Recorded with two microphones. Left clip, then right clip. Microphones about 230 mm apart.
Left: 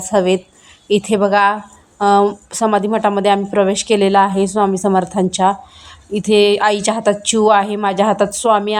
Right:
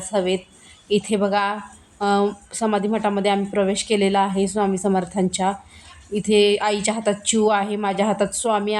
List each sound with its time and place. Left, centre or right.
0.1 s a woman's voice: centre